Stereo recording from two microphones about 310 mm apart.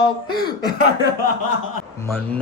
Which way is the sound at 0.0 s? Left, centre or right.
Centre.